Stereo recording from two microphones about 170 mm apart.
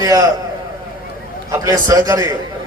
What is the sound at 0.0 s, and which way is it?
Speech, 20° right (ahead or behind).